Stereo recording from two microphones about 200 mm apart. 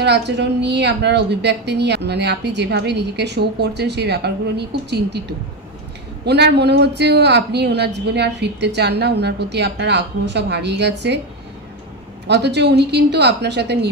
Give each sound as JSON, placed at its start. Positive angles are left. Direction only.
{"t": 0.0, "sound": "a woman's voice", "side_deg": -55}
{"t": 6.2, "sound": "a woman's voice", "side_deg": -55}
{"t": 12.3, "sound": "a woman's voice", "side_deg": -60}